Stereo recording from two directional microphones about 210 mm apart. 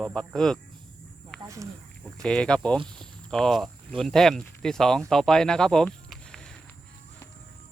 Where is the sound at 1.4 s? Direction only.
15° right (ahead or behind).